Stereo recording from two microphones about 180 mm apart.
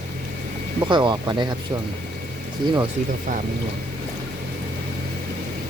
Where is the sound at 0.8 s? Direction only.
25° right (ahead or behind).